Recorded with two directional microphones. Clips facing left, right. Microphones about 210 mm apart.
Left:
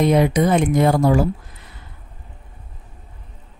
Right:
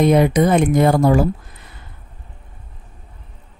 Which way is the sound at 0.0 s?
55° right (ahead or behind).